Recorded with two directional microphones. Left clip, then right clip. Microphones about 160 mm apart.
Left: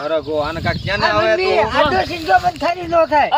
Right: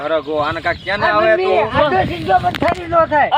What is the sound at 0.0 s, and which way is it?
Speech, 40° left (ahead or behind).